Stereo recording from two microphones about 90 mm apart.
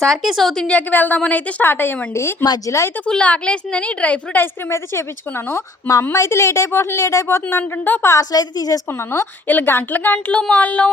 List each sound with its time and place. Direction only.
0.0 s a woman's voice: centre (ahead or behind); by 2.3 s 25° left (ahead or behind)
2.6 s a woman's voice: 35° left (ahead or behind)
3.1 s a woman's voice: 15° left (ahead or behind)
5.5 s a woman's voice: 30° left (ahead or behind)
7.6 s a woman's voice: 20° left (ahead or behind)
8.1 s a woman's voice: 40° left (ahead or behind)
8.9 s a woman's voice: 30° left (ahead or behind)